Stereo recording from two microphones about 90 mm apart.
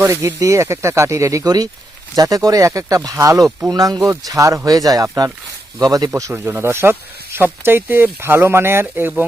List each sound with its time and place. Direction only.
0.1 s speech: 35° right (ahead or behind)
6.3 s speech: 25° right (ahead or behind)